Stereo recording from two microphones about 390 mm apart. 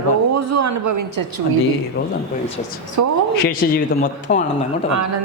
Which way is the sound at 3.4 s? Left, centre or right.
Left.